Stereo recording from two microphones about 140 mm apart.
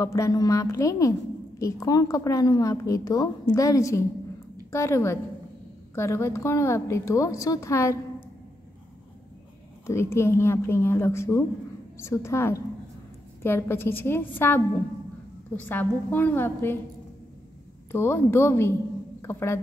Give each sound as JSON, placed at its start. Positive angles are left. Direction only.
{"t": 0.0, "sound": "a woman's voice", "side_deg": 20}
{"t": 9.8, "sound": "a woman's voice", "side_deg": 20}
{"t": 17.9, "sound": "a woman's voice", "side_deg": 15}